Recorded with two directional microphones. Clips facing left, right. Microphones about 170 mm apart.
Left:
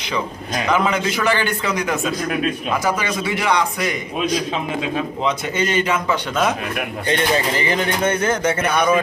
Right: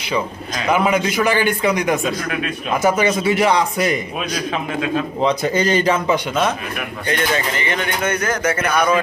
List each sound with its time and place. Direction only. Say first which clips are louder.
0.7 s a man's voice: right 3 dB; 10° right (ahead or behind)
2.8 s speech: right 5 dB; 25° right (ahead or behind)
5.2 s speech: right 5 dB; 35° right (ahead or behind)
7.1 s speech: left 1 dB; 30° left (ahead or behind)